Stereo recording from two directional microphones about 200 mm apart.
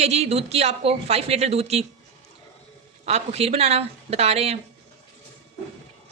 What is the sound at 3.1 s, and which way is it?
Speech, 30° right (ahead or behind).